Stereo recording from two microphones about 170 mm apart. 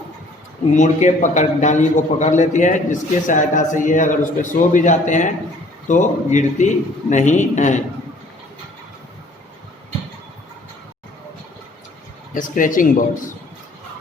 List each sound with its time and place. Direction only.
0.7 s a man's voice: 45° left (ahead or behind)
12.3 s a man's voice: 50° left (ahead or behind)